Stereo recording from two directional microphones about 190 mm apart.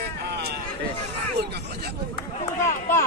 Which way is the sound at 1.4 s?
60° right (ahead or behind).